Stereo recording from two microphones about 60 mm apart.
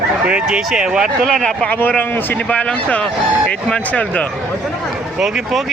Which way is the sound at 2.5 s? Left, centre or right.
Centre.